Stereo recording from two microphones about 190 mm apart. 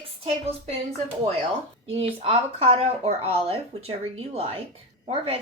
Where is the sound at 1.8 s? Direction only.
30° right (ahead or behind).